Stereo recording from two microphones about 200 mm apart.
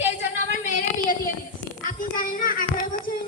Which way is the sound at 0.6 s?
45° left (ahead or behind).